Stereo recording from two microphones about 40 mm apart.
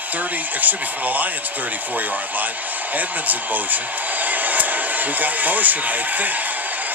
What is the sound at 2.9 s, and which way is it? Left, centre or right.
Speech, right.